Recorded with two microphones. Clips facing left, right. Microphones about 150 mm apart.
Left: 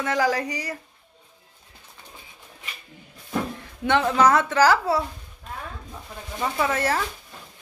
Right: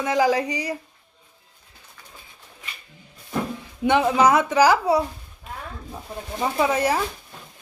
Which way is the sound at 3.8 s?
15° right (ahead or behind).